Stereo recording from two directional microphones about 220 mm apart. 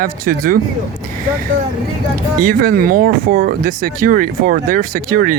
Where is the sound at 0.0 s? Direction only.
40° right (ahead or behind).